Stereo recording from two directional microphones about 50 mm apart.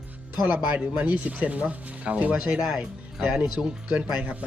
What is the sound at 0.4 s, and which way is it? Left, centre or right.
Speech, right.